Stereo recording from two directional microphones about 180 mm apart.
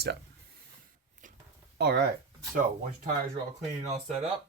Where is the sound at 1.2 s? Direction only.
45° right (ahead or behind).